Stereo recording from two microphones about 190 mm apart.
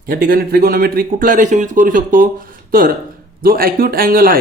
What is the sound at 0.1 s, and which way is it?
Speech, 50° right (ahead or behind).